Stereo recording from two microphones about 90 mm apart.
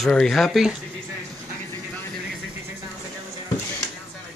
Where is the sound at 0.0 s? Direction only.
5° left (ahead or behind).